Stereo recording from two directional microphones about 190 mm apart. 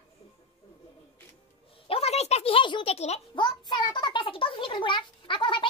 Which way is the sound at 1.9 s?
30° left (ahead or behind).